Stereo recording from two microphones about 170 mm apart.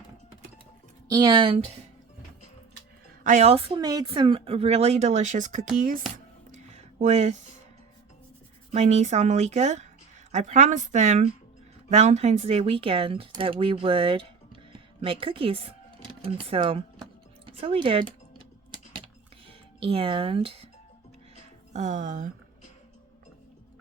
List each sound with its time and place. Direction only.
1.0 s speech: 20° right (ahead or behind)
3.2 s a woman's voice: 40° right (ahead or behind)
6.5 s a sound: 45° right (ahead or behind)
8.7 s a woman's voice: 40° right (ahead or behind)
16.4 s music: 35° right (ahead or behind)
19.8 s speech: 35° right (ahead or behind)
21.7 s a woman's voice: 45° right (ahead or behind)